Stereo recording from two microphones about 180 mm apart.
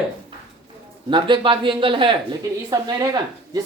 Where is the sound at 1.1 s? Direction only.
25° right (ahead or behind).